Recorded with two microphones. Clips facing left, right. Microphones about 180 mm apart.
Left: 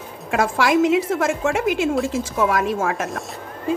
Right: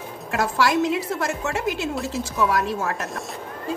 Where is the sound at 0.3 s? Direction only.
55° left (ahead or behind).